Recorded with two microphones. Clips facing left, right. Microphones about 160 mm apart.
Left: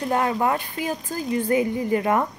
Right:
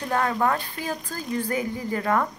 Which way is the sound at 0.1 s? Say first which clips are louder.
Left 1 dB; 20° left (ahead or behind).